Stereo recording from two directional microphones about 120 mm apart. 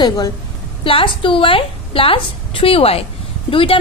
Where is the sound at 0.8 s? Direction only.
45° left (ahead or behind).